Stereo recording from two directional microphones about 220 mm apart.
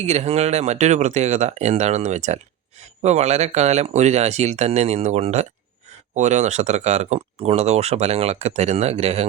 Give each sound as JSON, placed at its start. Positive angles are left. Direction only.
{"t": 0.0, "sound": "speech", "side_deg": -30}